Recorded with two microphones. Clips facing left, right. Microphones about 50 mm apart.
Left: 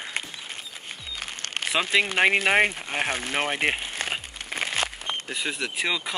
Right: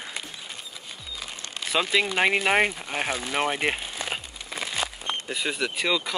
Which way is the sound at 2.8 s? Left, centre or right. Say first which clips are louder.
Left 1 dB; left.